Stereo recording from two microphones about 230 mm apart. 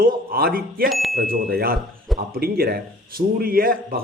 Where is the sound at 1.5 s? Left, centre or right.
Right.